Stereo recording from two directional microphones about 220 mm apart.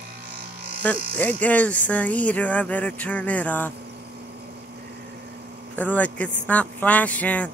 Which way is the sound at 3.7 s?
50° right (ahead or behind).